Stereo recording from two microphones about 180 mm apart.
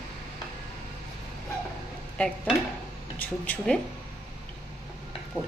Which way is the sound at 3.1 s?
10° left (ahead or behind).